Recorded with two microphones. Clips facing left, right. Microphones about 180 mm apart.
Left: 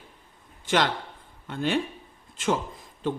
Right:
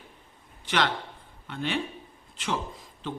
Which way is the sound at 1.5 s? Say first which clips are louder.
Left 4 dB; 45° left (ahead or behind).